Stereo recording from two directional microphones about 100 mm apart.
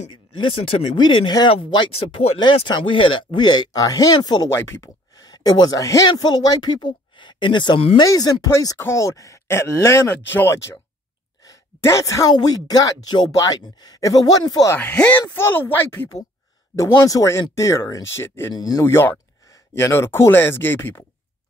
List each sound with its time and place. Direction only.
0.1 s speech: 60° left (ahead or behind); by 4.5 s 40° left (ahead or behind)
4.5 s speech: 25° left (ahead or behind)
5.2 s speech: 40° left (ahead or behind)
8.0 s speech: 35° left (ahead or behind)
11.4 s a sound: 30° left (ahead or behind)
12.3 s speech: 40° left (ahead or behind)
14.8 s speech: 15° left (ahead or behind)
16.7 s speech: 35° left (ahead or behind)
18.5 s speech: 40° left (ahead or behind)
18.9 s speech: 25° left (ahead or behind)